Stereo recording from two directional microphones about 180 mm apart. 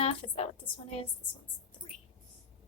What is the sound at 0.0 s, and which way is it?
Speech, 30° left (ahead or behind).